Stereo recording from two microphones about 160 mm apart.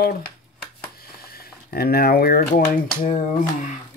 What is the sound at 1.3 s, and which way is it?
Speech, 70° left (ahead or behind).